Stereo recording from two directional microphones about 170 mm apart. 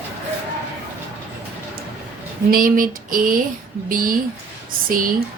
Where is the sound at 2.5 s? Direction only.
55° right (ahead or behind).